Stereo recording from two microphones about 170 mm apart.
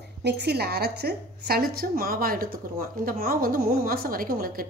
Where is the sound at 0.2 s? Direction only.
80° right.